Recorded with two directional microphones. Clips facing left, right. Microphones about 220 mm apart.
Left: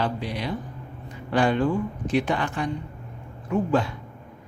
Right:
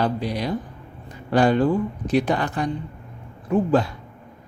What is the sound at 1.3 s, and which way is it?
A woman's voice, 40° right (ahead or behind).